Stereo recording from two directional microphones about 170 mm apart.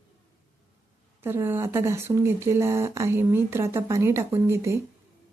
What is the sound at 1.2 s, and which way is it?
Speech, 15° right (ahead or behind).